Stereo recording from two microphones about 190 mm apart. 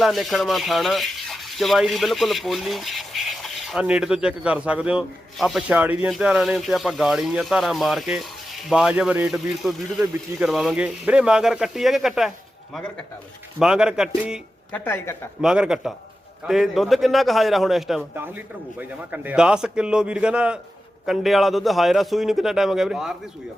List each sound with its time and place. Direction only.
0.0 s speech: centre (ahead or behind)
13.6 s speech: 5° right (ahead or behind)
14.7 s speech: 10° left (ahead or behind)
15.4 s speech: 5° right (ahead or behind)